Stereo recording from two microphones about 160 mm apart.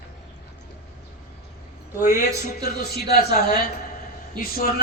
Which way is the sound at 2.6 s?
75° left (ahead or behind).